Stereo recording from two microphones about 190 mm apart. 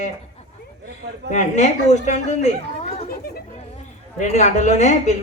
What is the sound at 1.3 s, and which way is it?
A woman's voice, 40° left (ahead or behind).